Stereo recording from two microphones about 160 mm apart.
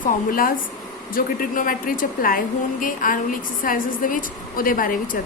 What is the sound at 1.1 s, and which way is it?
A woman's voice, 60° left (ahead or behind).